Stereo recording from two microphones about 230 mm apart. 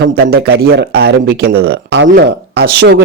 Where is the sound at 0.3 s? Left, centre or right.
Right.